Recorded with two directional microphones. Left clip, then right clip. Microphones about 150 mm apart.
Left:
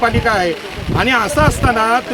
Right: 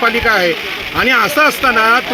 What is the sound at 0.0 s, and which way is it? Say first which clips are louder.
Speech: right 2 dB; 30° left (ahead or behind).